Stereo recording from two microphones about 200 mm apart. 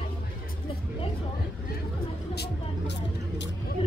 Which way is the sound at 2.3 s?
55° left (ahead or behind).